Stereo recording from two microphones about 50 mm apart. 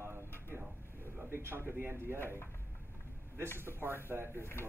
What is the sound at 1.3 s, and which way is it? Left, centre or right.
Speech, right.